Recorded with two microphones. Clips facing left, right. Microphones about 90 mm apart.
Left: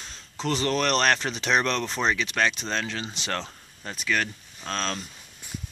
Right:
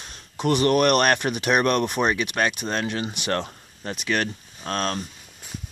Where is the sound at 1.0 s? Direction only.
15° right (ahead or behind).